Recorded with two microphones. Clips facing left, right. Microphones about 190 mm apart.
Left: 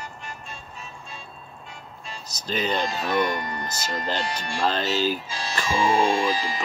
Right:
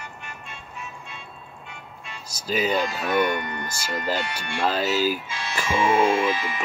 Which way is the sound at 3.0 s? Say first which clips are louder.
Right 1 dB; 35° left (ahead or behind).